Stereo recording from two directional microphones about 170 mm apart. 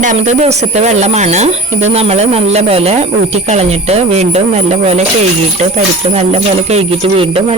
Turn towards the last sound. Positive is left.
turn(degrees=-35)  # may be behind; listen again after turning